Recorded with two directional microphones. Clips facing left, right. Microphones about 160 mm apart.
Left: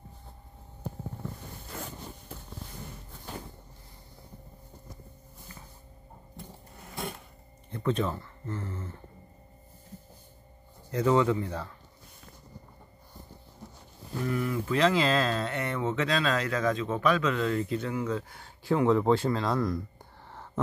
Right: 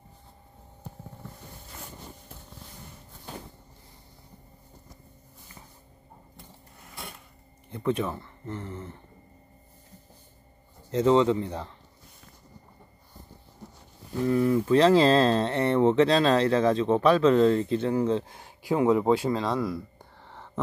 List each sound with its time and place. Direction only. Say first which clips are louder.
7.7 s speech: right 1 dB; 10° right (ahead or behind)
10.9 s speech: right 3 dB; 25° right (ahead or behind)
14.2 s speech: right 7 dB; 30° right (ahead or behind)
18.4 s speech: left 2 dB; 15° right (ahead or behind)